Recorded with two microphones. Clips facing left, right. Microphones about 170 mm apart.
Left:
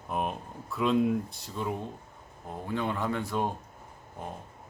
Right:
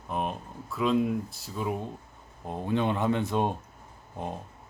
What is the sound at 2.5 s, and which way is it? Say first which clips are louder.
Speech: right 4 dB; 20° right (ahead or behind).